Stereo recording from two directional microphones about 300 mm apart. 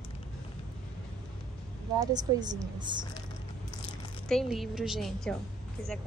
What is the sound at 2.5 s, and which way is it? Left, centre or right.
Speech, centre.